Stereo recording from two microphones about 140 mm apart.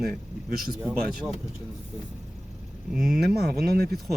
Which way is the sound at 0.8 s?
5° right (ahead or behind).